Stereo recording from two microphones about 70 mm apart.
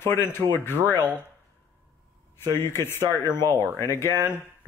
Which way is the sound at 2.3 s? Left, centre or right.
Left.